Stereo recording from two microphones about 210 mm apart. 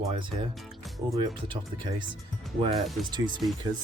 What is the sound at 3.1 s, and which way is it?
Speech, 20° right (ahead or behind).